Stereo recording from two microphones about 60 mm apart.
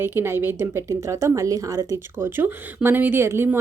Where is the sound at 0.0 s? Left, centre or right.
Right.